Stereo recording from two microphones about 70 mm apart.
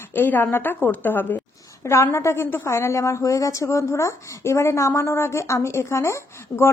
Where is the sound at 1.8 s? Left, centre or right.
Left.